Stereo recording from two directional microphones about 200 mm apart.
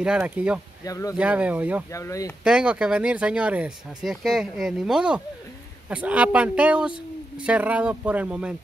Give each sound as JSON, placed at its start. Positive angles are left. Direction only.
{"t": 0.0, "sound": "speech", "side_deg": -5}
{"t": 0.8, "sound": "speech", "side_deg": 15}
{"t": 1.1, "sound": "speech", "side_deg": -5}
{"t": 1.9, "sound": "speech", "side_deg": 15}
{"t": 2.4, "sound": "speech", "side_deg": -5}